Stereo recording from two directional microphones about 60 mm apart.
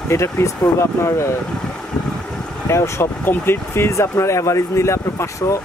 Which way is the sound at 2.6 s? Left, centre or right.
Left.